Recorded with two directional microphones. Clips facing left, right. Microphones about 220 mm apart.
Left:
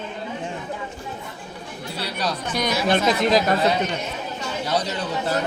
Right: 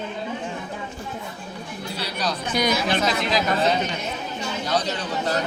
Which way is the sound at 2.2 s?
Centre (ahead or behind).